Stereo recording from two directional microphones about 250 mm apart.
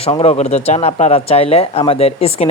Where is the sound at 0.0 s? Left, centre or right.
Left.